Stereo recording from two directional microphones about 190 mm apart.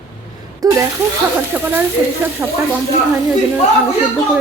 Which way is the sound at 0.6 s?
15° right (ahead or behind).